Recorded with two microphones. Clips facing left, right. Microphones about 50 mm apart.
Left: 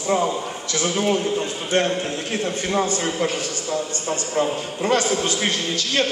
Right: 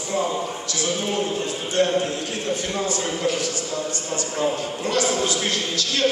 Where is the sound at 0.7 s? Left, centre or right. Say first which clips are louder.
Left 7 dB; left.